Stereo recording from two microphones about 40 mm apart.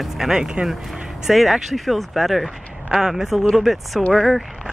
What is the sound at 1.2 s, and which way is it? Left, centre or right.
Speech, centre.